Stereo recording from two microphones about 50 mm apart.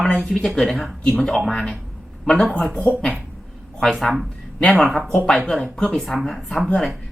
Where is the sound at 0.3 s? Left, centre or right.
Centre.